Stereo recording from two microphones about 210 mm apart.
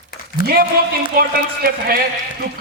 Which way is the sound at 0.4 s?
50° right (ahead or behind).